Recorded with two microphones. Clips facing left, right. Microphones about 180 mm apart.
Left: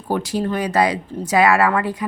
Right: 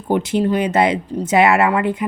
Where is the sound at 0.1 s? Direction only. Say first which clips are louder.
Right 4 dB; 20° right (ahead or behind).